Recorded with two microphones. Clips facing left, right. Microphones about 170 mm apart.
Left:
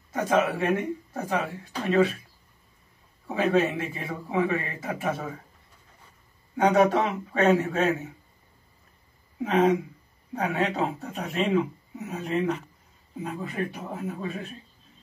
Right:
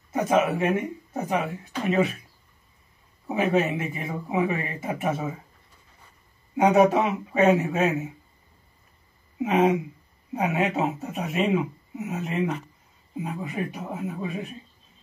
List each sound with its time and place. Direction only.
0.1 s speech: 20° right (ahead or behind)
3.3 s speech: 20° right (ahead or behind)
6.5 s speech: 10° right (ahead or behind)
9.4 s speech: 10° right (ahead or behind)